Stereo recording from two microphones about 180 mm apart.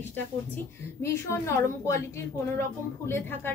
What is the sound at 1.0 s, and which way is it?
Speech, 15° left (ahead or behind).